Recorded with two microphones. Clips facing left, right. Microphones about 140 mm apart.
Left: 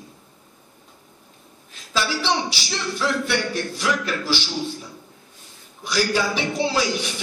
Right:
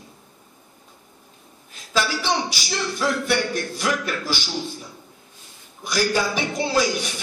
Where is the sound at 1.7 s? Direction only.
45° right (ahead or behind).